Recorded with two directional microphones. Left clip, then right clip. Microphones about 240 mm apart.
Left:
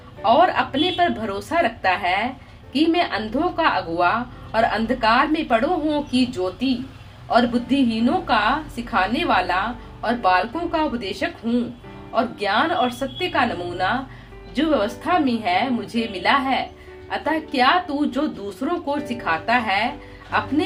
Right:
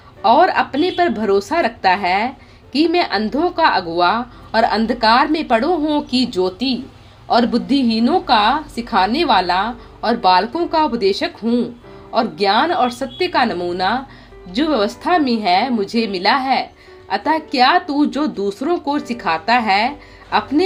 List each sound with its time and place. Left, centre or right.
0.2 s speech: right
7.9 s speech: right